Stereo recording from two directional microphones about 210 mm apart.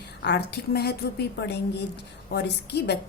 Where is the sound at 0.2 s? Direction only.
50° left (ahead or behind).